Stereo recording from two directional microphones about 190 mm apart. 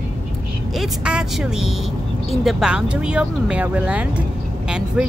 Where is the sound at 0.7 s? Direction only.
5° right (ahead or behind).